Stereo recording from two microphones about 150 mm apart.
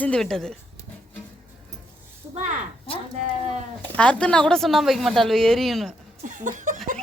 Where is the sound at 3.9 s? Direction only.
10° left (ahead or behind).